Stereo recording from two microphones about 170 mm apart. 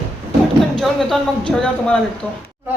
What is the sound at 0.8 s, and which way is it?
Speech, centre (ahead or behind).